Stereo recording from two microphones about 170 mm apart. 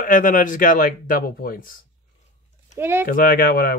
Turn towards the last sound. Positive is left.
turn(degrees=60)  # may be behind; listen again after turning